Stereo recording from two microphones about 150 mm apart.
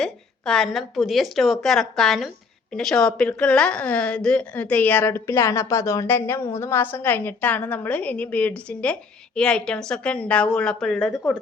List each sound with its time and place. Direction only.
0.0 s a woman's voice: 5° left (ahead or behind)